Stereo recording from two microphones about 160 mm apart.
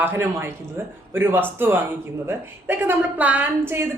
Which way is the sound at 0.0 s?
15° right (ahead or behind).